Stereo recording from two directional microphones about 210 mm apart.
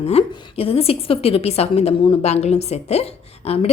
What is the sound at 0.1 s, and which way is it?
A woman's voice, 30° left (ahead or behind).